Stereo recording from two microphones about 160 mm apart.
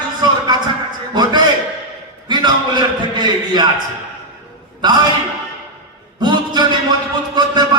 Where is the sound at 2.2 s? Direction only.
25° right (ahead or behind).